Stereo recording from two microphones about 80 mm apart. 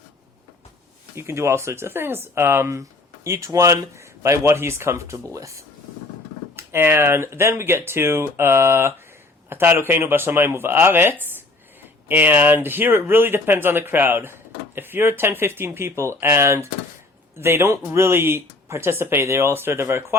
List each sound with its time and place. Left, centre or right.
1.1 s speech: right
6.6 s speech: right